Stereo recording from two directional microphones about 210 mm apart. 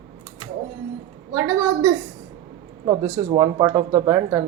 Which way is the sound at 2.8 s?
20° right (ahead or behind).